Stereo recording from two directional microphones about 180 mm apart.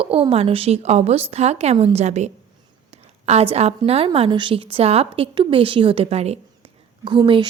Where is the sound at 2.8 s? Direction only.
35° right (ahead or behind).